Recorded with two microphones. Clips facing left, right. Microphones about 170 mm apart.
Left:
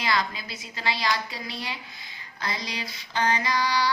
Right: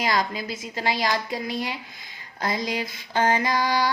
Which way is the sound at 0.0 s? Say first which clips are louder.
Right 3 dB; 45° right (ahead or behind).